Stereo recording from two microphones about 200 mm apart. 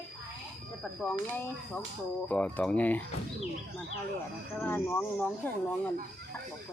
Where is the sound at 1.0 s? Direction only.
5° left (ahead or behind).